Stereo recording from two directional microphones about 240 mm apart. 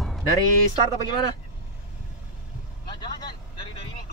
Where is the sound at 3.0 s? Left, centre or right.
Centre.